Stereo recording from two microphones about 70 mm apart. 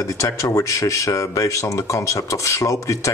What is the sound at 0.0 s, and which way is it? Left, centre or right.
Speech, left.